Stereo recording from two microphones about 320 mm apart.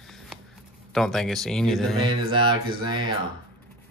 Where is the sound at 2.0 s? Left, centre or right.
Centre.